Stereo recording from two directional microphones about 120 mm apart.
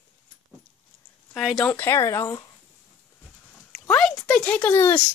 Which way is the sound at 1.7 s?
20° left (ahead or behind).